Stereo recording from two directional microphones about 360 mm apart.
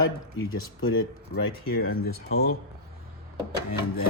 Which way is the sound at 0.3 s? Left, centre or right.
Left.